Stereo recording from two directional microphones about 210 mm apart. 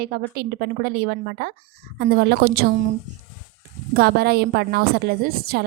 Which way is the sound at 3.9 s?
50° right (ahead or behind).